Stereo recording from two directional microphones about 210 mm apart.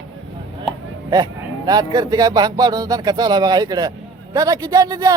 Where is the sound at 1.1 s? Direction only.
20° right (ahead or behind).